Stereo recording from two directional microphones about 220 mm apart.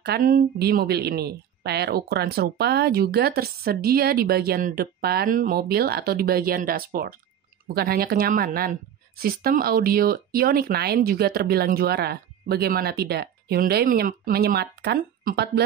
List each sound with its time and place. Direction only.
0.0 s a woman's voice: 45° right (ahead or behind)